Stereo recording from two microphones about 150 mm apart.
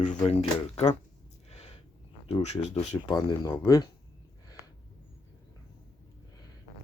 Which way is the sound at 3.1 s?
25° left (ahead or behind).